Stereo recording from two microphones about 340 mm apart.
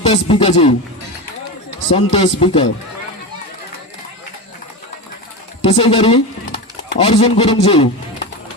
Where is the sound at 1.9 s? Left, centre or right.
Centre.